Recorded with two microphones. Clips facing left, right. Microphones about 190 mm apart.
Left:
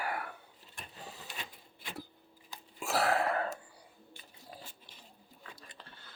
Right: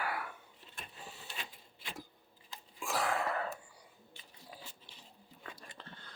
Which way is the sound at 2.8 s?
70° left (ahead or behind).